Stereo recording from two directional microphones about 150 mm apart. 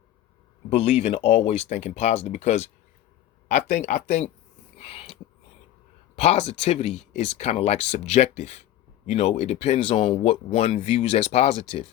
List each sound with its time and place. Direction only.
0.8 s speech: 45° left (ahead or behind)
4.8 s a sound: 40° left (ahead or behind)
6.1 s speech: 45° left (ahead or behind)